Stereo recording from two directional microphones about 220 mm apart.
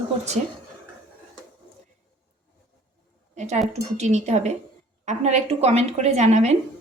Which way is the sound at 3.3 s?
30° right (ahead or behind).